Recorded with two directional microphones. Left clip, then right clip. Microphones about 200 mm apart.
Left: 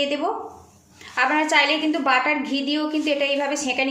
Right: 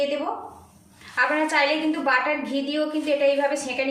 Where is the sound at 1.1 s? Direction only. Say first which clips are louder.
Left 3 dB; 45° left (ahead or behind).